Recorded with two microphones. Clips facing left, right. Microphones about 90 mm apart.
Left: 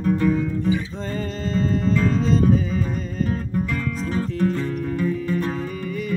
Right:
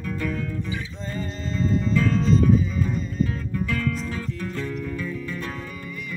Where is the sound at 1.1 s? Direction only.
50° left (ahead or behind).